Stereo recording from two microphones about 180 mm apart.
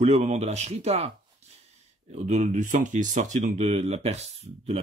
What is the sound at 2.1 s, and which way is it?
Speech, 40° right (ahead or behind).